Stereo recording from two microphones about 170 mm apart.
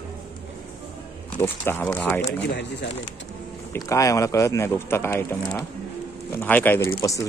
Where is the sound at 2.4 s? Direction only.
85° left.